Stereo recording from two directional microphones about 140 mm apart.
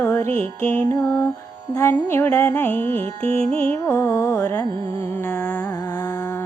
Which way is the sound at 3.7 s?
20° left (ahead or behind).